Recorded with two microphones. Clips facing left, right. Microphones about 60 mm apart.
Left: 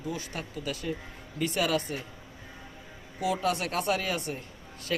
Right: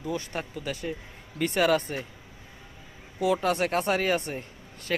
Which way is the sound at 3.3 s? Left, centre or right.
Right.